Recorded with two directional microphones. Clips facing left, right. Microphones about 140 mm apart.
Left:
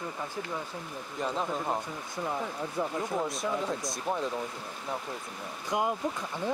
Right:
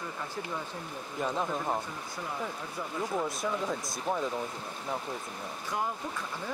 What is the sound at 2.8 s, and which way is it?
Speech, 25° left (ahead or behind).